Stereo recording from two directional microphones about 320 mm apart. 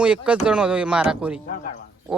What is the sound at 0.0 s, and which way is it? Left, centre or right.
Speech, centre.